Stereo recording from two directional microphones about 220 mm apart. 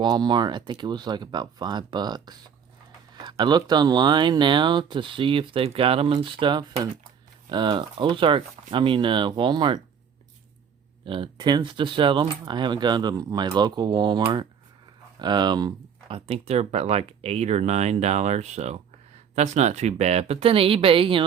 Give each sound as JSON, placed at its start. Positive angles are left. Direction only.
{"t": 0.0, "sound": "speech", "side_deg": -20}
{"t": 11.0, "sound": "speech", "side_deg": -25}